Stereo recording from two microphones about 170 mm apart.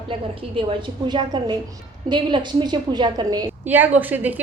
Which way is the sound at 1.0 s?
25° right (ahead or behind).